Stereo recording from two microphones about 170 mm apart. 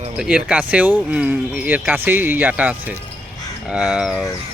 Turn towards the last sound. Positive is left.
turn(degrees=-5)  # may be behind; listen again after turning